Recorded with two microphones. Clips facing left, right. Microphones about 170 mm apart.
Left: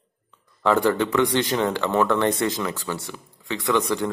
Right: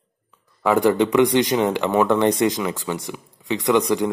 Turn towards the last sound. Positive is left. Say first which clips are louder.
# right 4 dB
turn(degrees=-15)  # may be behind; listen again after turning